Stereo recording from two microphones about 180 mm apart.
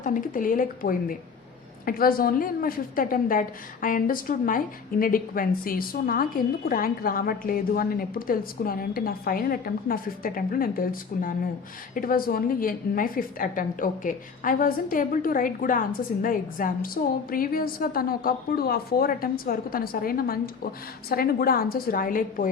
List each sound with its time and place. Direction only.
0.0 s a woman's voice: 45° left (ahead or behind)